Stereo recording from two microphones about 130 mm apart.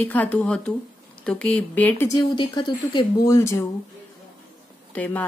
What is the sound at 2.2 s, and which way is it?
Speech, 35° left (ahead or behind).